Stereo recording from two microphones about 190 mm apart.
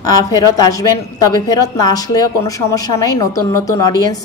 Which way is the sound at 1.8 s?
20° left (ahead or behind).